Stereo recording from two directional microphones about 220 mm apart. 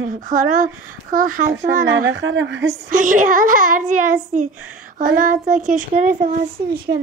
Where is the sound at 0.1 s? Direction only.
35° right (ahead or behind).